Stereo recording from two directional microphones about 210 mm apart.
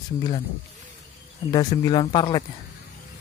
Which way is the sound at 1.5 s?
20° left (ahead or behind).